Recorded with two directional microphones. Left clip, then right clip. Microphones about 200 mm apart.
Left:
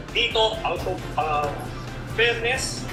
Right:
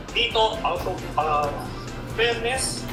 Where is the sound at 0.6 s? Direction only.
35° left (ahead or behind).